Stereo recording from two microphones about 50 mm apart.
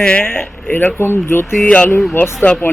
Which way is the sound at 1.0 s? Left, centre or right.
Left.